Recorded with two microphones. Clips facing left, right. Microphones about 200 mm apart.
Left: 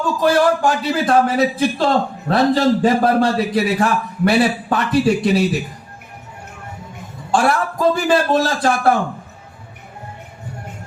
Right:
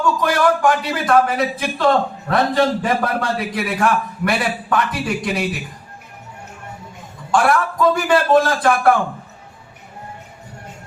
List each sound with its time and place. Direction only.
0.0 s a man's voice: 30° left (ahead or behind)
7.3 s speech: 30° left (ahead or behind)